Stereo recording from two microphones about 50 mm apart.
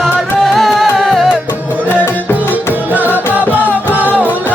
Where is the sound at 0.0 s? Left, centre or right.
Centre.